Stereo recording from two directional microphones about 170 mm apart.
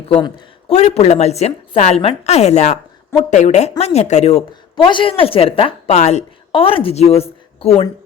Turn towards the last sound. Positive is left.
turn(degrees=35)  # may be behind; listen again after turning